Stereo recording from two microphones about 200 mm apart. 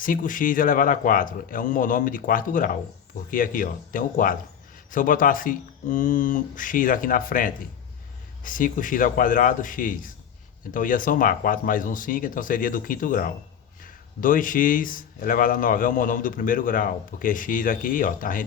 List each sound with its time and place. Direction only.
0.0 s speech: 40° left (ahead or behind)